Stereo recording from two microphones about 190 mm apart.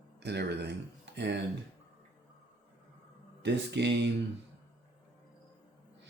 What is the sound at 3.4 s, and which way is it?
Speech, 65° right (ahead or behind).